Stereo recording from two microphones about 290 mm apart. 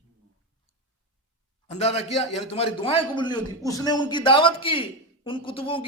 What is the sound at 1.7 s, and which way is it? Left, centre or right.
A man's voice, left.